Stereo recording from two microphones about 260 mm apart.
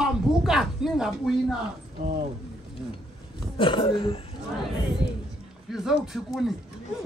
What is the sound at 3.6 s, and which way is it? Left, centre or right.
Speech, centre.